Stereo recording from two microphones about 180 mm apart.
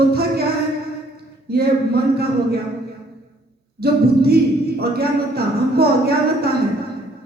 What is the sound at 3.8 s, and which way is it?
A woman's voice, 60° right (ahead or behind).